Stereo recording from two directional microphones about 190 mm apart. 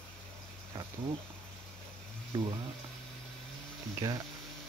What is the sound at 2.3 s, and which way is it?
Speech, 25° right (ahead or behind).